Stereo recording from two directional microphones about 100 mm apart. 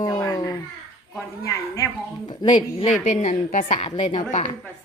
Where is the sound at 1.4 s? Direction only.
30° left (ahead or behind).